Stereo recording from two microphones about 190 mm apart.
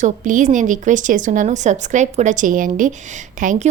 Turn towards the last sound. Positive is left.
turn(degrees=-40)  # may be behind; listen again after turning